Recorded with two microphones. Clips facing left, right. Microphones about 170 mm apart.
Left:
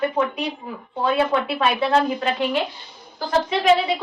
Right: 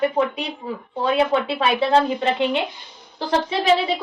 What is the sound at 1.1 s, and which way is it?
Speech, 25° right (ahead or behind).